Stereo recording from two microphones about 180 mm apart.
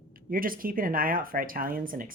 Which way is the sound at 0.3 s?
50° right (ahead or behind).